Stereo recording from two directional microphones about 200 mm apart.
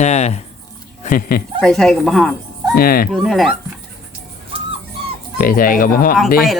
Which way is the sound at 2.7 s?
50° left (ahead or behind).